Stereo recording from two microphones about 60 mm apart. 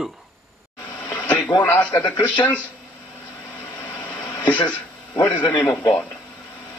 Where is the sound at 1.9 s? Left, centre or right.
Left.